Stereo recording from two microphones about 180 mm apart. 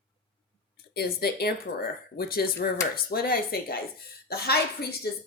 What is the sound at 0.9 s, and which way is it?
Speech, 60° left (ahead or behind).